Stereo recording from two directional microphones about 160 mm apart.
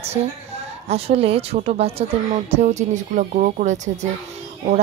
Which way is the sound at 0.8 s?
40° right (ahead or behind).